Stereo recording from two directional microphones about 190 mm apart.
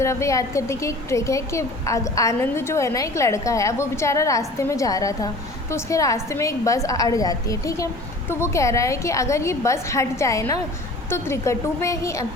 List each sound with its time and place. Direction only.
0.0 s a woman's voice: 15° left (ahead or behind)